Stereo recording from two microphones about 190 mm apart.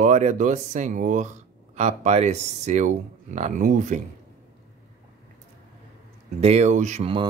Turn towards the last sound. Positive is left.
turn(degrees=-30)  # may be behind; listen again after turning